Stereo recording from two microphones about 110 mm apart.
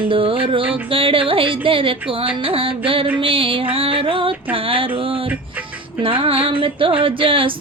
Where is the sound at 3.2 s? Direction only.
55° right (ahead or behind).